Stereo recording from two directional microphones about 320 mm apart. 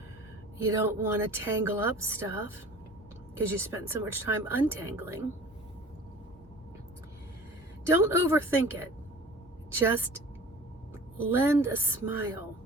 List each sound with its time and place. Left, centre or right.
0.7 s speech: centre
7.9 s speech: centre
9.7 s speech: centre
11.3 s speech: centre